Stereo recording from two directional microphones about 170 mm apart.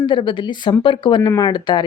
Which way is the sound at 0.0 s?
30° left (ahead or behind).